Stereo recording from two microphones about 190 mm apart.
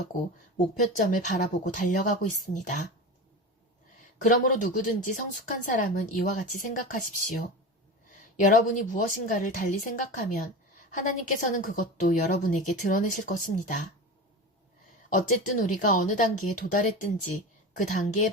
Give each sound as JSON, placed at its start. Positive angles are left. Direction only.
{"t": 0.5, "sound": "speech", "side_deg": 40}
{"t": 4.2, "sound": "a woman's voice", "side_deg": 40}
{"t": 15.6, "sound": "a woman's voice", "side_deg": 45}